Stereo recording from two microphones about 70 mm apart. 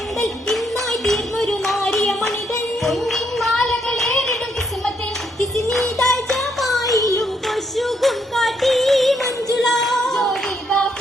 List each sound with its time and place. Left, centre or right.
0.2 s music: centre
5.5 s music: centre
6.9 s child singing: left
7.2 s music: centre
9.6 s singing: centre